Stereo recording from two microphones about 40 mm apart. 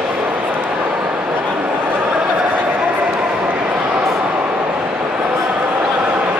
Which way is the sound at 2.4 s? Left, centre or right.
Right.